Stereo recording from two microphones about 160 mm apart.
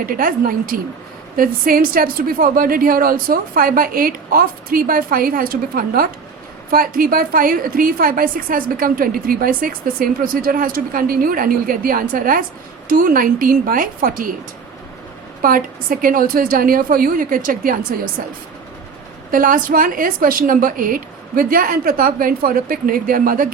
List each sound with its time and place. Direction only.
0.0 s a woman's voice: 60° right (ahead or behind)
15.4 s a woman's voice: 60° right (ahead or behind)